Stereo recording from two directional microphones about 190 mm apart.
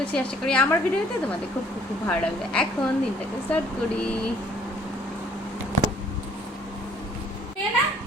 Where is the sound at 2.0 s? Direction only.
5° left (ahead or behind).